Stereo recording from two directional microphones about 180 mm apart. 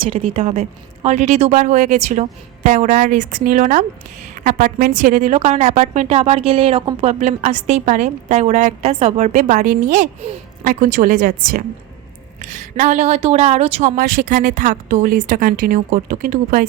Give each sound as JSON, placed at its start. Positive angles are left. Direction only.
{"t": 0.0, "sound": "a woman's voice", "side_deg": -30}